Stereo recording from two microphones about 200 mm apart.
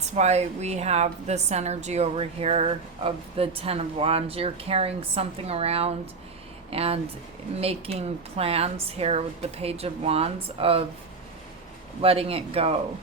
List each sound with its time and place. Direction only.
0.0 s a woman's voice: 35° right (ahead or behind)
12.0 s a man's voice: 30° right (ahead or behind)